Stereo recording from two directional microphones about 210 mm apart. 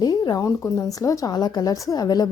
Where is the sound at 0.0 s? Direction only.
20° left (ahead or behind).